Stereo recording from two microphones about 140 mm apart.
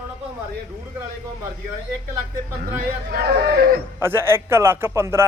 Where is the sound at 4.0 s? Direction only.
15° right (ahead or behind).